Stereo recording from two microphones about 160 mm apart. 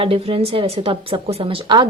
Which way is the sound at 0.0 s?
35° right (ahead or behind).